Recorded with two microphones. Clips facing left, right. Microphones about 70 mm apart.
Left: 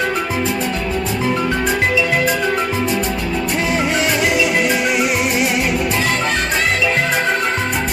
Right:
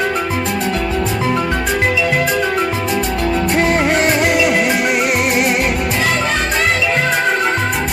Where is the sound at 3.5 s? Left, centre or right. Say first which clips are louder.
Right 3 dB; right.